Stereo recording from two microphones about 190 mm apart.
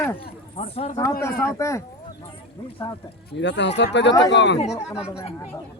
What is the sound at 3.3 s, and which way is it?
Speech, 65° left (ahead or behind).